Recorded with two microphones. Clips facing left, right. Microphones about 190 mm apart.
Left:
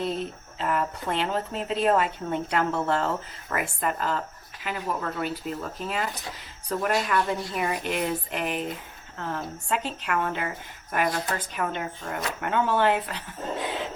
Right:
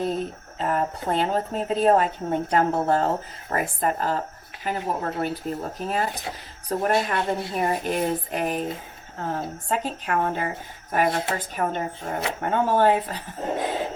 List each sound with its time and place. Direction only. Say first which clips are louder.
0.6 s speech: right 2 dB; 40° right (ahead or behind)
10.9 s speech: right 4 dB; 25° right (ahead or behind)
11.5 s speech: right 4 dB; 40° right (ahead or behind)
12.0 s speech: right 3 dB; 25° right (ahead or behind)